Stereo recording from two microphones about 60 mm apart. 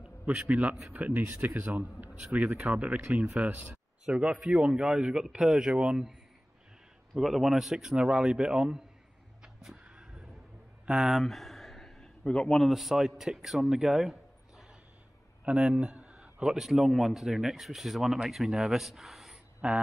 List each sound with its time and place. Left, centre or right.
0.0 s a man's voice: right
3.4 s speech: right
4.1 s a man's voice: right
7.2 s a man's voice: centre
9.4 s vehicle: centre
10.9 s a sound: centre
12.3 s a man's voice: centre
12.6 s a man's voice: centre
15.4 s a man's voice: centre
19.6 s speech: centre